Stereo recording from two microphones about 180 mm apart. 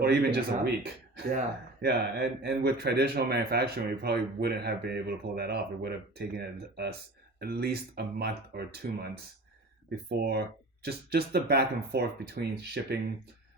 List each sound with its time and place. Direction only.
0.0 s speech: 65° right (ahead or behind)
1.8 s speech: 65° right (ahead or behind)
10.1 s speech: 65° right (ahead or behind)